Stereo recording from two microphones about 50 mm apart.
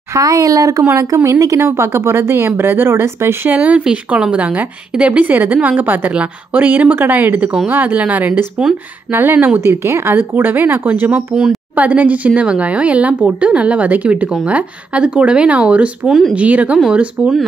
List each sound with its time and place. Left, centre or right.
0.1 s speech: right
0.9 s a woman's voice: right
3.4 s speech: right
3.8 s speech: centre
5.2 s speech: right
8.6 s speech: centre
9.1 s speech: right
9.6 s a woman's voice: right
10.1 s speech: right